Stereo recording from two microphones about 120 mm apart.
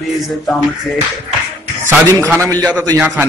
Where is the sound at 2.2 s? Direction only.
20° right (ahead or behind).